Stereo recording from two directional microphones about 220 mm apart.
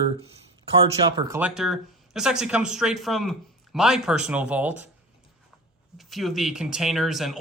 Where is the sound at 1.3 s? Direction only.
5° right (ahead or behind).